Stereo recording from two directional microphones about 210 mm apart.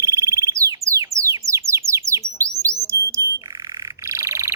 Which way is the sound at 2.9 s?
15° right (ahead or behind).